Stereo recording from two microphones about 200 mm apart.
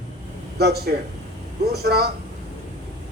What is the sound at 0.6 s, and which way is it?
Speech, 55° right (ahead or behind).